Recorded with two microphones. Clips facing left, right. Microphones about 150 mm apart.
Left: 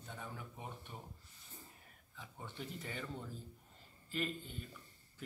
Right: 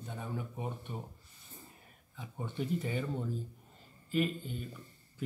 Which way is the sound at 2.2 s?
15° right (ahead or behind).